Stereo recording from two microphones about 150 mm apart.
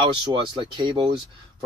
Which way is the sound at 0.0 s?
30° right (ahead or behind).